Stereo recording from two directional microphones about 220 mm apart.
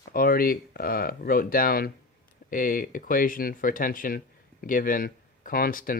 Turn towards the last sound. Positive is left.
turn(degrees=40)  # may be behind; listen again after turning